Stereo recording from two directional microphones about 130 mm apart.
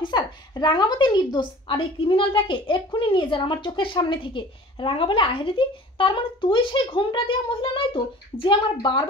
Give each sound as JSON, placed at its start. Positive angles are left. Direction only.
{"t": 0.0, "sound": "a woman's voice", "side_deg": 35}